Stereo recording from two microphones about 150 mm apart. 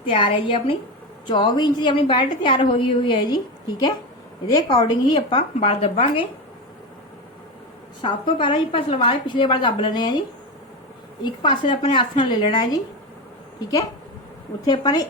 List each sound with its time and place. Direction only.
0.0 s a woman's voice: 35° left (ahead or behind)
5.3 s a woman's voice: 45° left (ahead or behind)
8.0 s a woman's voice: 35° left (ahead or behind)
11.2 s a woman's voice: 30° left (ahead or behind)